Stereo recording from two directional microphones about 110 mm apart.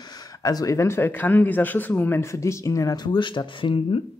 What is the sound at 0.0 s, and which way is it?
Speech, 40° left (ahead or behind).